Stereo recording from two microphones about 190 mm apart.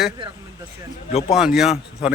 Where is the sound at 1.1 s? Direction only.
35° left (ahead or behind).